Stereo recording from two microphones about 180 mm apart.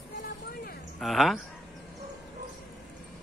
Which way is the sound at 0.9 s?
Centre (ahead or behind).